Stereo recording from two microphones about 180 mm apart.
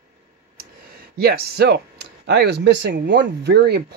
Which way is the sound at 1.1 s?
60° right (ahead or behind).